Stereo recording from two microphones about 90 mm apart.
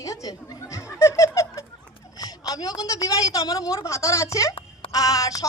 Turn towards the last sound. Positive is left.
turn(degrees=40)  # may be behind; listen again after turning